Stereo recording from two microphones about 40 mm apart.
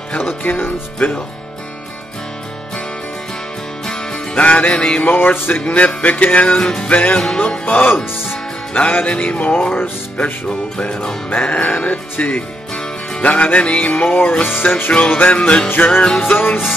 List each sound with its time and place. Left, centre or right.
0.5 s music: left
3.8 s music: centre
4.4 s speech: left
5.0 s music: left
6.0 s speech: left
6.5 s music: left
6.9 s speech: left
7.3 s music: left
7.6 s speech: left
8.7 s speech: left
14.5 s speech: left
15.0 s speech: left
15.7 s speech: left
16.2 s music: left